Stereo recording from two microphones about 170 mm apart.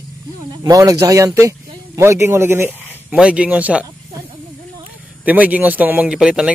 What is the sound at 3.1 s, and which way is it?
Speech, 5° right (ahead or behind).